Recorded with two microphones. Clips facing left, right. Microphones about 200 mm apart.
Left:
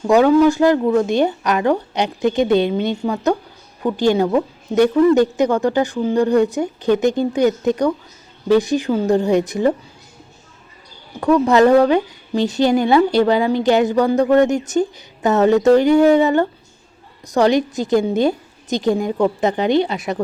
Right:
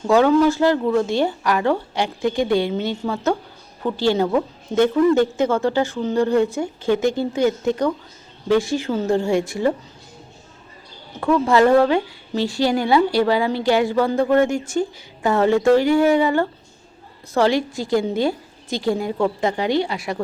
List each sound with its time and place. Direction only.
0.1 s speech: 15° left (ahead or behind)
11.2 s a woman's voice: 15° left (ahead or behind)